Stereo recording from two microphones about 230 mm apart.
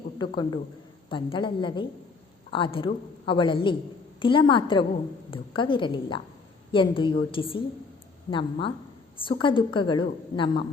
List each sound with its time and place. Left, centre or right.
0.2 s a woman's voice: centre